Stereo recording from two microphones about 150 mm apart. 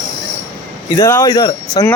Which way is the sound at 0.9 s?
20° left (ahead or behind).